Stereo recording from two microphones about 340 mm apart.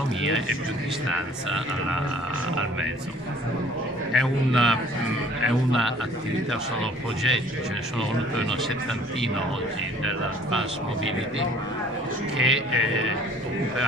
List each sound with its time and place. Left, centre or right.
0.2 s speech: right
4.1 s speech: centre
6.5 s speech: centre
12.4 s speech: right